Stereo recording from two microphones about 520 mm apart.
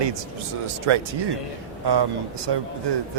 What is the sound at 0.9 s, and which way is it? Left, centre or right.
Speech, right.